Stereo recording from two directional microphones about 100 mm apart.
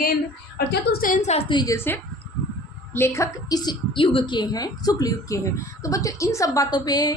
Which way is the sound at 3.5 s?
40° left (ahead or behind).